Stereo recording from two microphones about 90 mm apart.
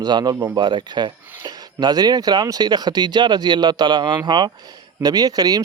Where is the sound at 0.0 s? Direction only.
50° right (ahead or behind).